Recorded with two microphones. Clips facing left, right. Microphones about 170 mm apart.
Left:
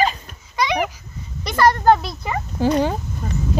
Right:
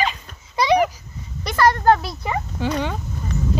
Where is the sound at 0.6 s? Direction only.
30° right (ahead or behind).